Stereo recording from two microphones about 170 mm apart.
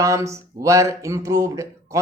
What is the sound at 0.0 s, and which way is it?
Speech, 20° right (ahead or behind).